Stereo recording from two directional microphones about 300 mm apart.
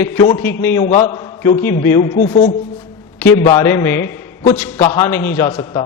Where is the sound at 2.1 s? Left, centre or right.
Left.